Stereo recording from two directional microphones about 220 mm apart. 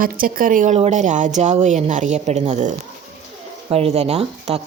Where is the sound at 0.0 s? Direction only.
40° right (ahead or behind).